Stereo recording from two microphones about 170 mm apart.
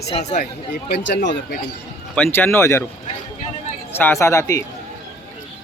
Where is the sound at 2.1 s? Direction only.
10° left (ahead or behind).